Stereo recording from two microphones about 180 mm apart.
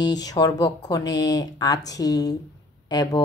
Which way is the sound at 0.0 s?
20° left (ahead or behind).